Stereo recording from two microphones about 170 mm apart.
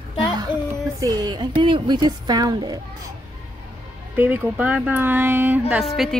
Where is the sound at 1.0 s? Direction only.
25° right (ahead or behind).